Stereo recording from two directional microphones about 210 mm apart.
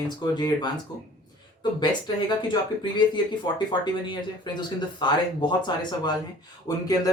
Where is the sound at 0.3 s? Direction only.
20° left (ahead or behind).